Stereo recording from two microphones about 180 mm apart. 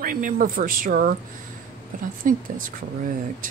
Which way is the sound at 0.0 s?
50° right (ahead or behind).